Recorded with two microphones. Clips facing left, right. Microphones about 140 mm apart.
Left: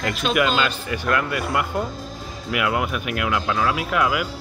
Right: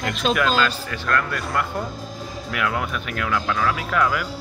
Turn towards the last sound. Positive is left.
turn(degrees=10)  # may be behind; listen again after turning